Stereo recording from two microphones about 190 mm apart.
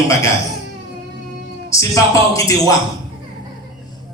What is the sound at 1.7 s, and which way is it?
A man's voice, 15° left (ahead or behind).